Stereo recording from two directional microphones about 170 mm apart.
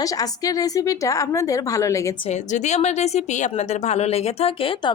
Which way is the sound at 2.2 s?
45° left (ahead or behind).